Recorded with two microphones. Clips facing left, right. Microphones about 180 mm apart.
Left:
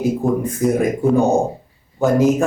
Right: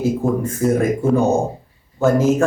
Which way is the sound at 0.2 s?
15° left (ahead or behind).